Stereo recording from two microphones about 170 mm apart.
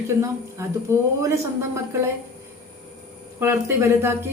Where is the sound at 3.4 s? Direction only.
15° right (ahead or behind).